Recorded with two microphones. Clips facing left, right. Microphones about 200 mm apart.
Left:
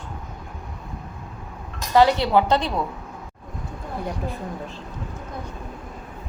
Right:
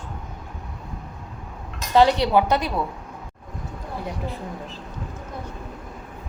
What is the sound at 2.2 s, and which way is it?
Speech, 15° right (ahead or behind).